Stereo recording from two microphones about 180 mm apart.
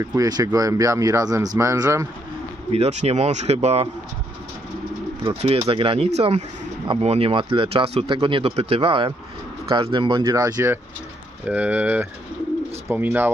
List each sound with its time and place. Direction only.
0.0 s speech: 20° right (ahead or behind)
2.7 s speech: 40° right (ahead or behind)
5.3 s speech: 35° right (ahead or behind); by 13.3 s 10° right (ahead or behind)